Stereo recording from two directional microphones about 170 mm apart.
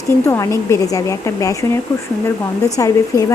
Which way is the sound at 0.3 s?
15° left (ahead or behind).